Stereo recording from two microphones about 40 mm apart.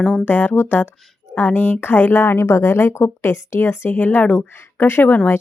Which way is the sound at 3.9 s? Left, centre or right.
Left.